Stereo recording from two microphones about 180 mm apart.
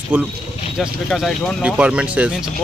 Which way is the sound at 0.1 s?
10° right (ahead or behind).